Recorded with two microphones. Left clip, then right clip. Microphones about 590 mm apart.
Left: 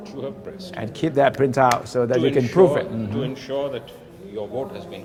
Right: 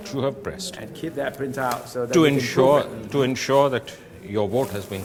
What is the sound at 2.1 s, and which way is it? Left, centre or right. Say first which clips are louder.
A man's voice: even; right.